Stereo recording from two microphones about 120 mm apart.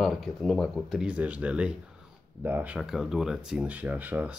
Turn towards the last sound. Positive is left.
turn(degrees=-15)  # may be behind; listen again after turning